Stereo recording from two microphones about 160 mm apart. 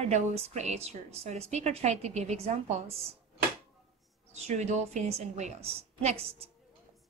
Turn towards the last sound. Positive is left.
turn(degrees=-40)  # may be behind; listen again after turning